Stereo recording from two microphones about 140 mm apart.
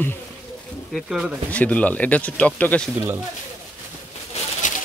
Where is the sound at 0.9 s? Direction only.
5° right (ahead or behind).